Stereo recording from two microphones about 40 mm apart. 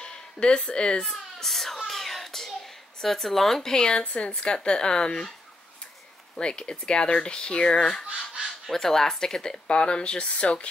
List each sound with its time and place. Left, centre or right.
0.0 s speech: left
1.0 s a child's voice: centre
3.9 s speech: left
6.4 s speech: left
8.7 s speech: centre; by 10.7 s left